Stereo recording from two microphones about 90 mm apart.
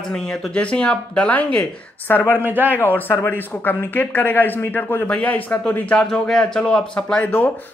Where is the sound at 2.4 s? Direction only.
20° right (ahead or behind).